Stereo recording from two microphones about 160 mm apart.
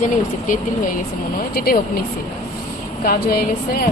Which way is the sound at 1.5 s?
65° left (ahead or behind).